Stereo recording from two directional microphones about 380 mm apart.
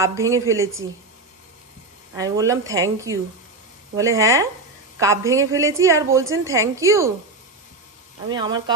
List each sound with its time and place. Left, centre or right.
0.0 s speech: centre
2.1 s speech: centre
8.3 s speech: centre